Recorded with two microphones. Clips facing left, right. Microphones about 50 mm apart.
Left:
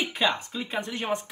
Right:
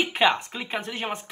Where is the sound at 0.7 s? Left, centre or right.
Right.